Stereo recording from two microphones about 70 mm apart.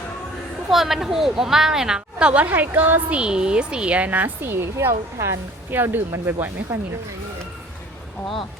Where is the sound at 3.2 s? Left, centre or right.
Centre; by 5.4 s right.